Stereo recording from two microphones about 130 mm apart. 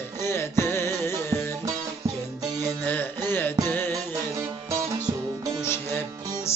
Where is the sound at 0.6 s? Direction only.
20° left (ahead or behind).